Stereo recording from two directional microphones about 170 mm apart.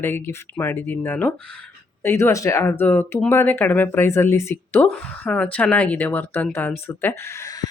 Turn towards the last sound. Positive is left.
turn(degrees=20)  # may be behind; listen again after turning